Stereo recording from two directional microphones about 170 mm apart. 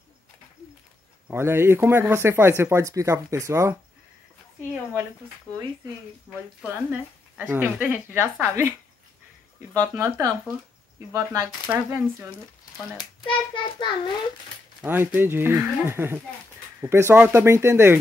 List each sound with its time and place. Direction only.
1.3 s speech: 15° right (ahead or behind)
6.3 s speech: 5° right (ahead or behind)
9.9 s speech: 15° right (ahead or behind)
12.9 s a child's voice: 25° left (ahead or behind)
14.8 s speech: 10° right (ahead or behind)